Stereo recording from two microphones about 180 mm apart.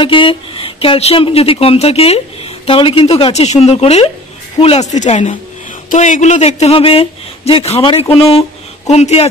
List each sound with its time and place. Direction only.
0.0 s speech: 30° left (ahead or behind)